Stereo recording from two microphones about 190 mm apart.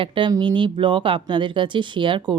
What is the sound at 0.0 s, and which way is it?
Speech, 25° right (ahead or behind).